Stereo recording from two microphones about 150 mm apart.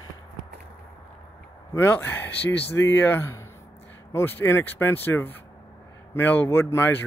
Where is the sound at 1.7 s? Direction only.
15° left (ahead or behind).